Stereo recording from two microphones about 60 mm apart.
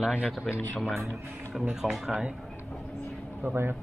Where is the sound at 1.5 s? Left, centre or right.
Centre.